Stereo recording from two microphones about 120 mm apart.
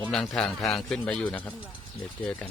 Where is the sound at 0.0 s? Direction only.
5° left (ahead or behind).